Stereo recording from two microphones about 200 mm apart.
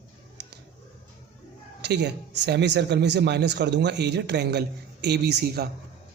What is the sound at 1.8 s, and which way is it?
A man's voice, 60° right (ahead or behind).